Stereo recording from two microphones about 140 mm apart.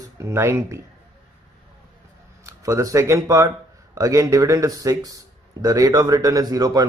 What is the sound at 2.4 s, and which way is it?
Speech, 20° right (ahead or behind).